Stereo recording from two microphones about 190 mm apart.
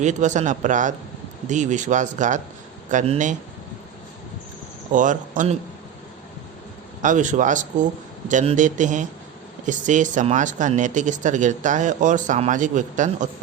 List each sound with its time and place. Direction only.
0.0 s speech: 40° right (ahead or behind)
4.9 s speech: 40° right (ahead or behind)
7.0 s speech: 40° right (ahead or behind)